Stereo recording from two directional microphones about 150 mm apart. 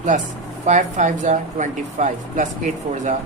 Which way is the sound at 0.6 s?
50° right (ahead or behind).